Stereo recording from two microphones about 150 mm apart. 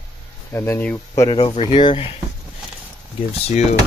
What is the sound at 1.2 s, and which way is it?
Speech, 35° left (ahead or behind).